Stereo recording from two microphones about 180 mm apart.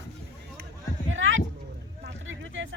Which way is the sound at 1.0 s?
90° right.